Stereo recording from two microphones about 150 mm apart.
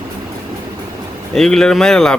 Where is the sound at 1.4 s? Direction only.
5° left (ahead or behind).